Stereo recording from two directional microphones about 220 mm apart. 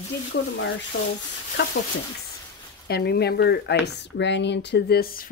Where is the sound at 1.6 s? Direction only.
55° left (ahead or behind).